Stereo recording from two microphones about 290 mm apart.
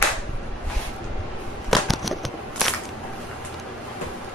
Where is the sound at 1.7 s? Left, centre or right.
Centre.